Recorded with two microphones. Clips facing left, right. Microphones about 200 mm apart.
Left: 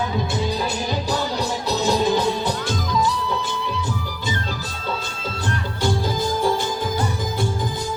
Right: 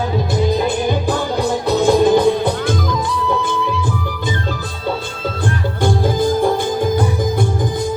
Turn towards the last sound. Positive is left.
turn(degrees=-55)  # may be behind; listen again after turning